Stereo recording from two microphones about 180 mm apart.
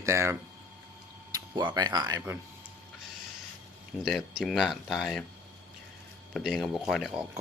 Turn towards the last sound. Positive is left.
turn(degrees=0)  # may be behind; listen again after turning